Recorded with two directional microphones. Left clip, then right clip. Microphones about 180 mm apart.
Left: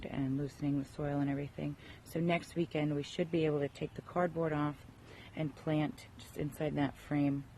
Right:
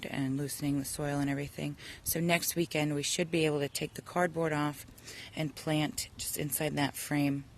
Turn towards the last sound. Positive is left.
turn(degrees=-20)  # may be behind; listen again after turning